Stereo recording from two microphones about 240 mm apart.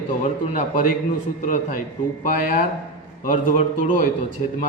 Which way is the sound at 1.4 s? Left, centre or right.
Left.